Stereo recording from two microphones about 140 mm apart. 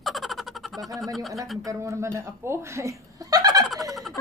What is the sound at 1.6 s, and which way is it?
Speech, 20° right (ahead or behind).